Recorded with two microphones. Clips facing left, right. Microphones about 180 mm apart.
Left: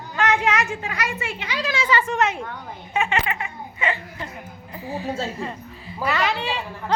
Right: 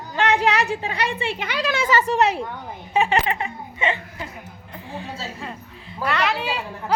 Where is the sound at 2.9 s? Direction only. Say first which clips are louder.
Right 4 dB; 35° right (ahead or behind).